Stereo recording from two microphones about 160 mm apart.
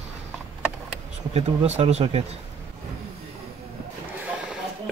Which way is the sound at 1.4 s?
40° right (ahead or behind).